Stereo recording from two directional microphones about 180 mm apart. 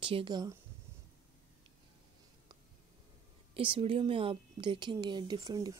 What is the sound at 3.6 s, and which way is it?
A woman's voice, 30° right (ahead or behind).